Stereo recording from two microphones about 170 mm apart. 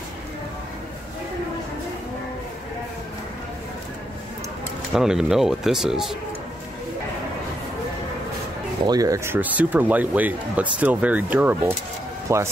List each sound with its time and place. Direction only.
4.9 s speech: 5° right (ahead or behind)
8.8 s speech: 20° right (ahead or behind)